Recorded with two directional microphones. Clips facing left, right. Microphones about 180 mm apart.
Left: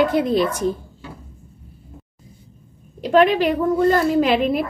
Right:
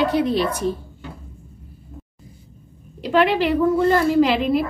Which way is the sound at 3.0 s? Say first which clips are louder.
Left 3 dB; 45° left (ahead or behind).